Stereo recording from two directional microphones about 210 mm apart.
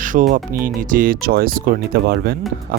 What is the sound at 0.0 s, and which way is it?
Speech, 40° right (ahead or behind).